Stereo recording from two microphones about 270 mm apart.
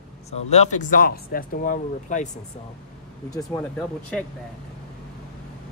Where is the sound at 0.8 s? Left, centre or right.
Left.